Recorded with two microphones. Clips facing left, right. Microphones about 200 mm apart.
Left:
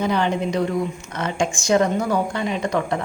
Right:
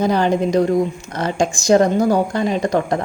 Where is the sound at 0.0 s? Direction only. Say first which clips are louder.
Right 5 dB; 40° right (ahead or behind).